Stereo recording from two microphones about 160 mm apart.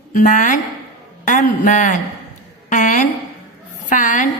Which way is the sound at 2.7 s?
50° left (ahead or behind).